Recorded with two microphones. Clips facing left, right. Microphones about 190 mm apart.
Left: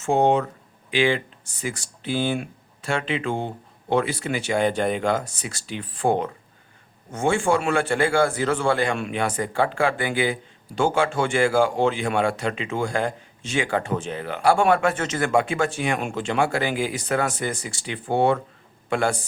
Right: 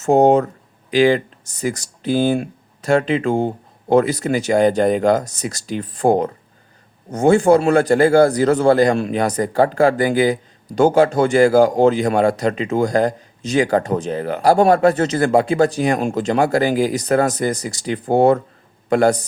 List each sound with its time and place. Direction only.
0.0 s speech: 40° right (ahead or behind)